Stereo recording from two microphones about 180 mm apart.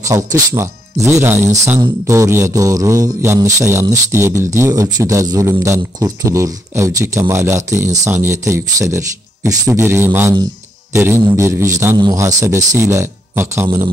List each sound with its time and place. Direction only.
0.0 s music: 20° right (ahead or behind)